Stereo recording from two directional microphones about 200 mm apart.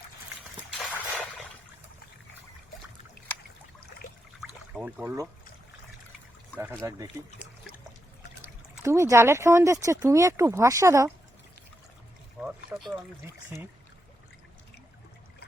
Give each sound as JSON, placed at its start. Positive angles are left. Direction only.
{"t": 0.8, "sound": "a sound", "side_deg": 5}
{"t": 4.7, "sound": "speech", "side_deg": -5}
{"t": 6.8, "sound": "speech", "side_deg": -15}
{"t": 8.8, "sound": "speech", "side_deg": -15}
{"t": 12.5, "sound": "speech", "side_deg": -5}